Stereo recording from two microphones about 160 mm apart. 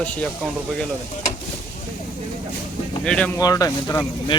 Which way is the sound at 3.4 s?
20° left (ahead or behind).